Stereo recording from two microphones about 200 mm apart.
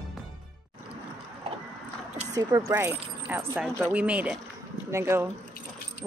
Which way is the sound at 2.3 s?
15° right (ahead or behind).